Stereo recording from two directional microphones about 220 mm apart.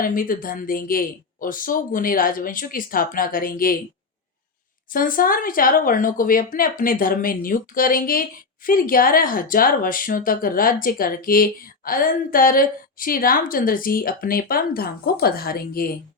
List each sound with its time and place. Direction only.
0.0 s speech: 40° left (ahead or behind)
4.9 s speech: 40° left (ahead or behind)